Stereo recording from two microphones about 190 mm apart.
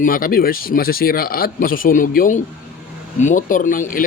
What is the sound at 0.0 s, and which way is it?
Speech, 50° left (ahead or behind).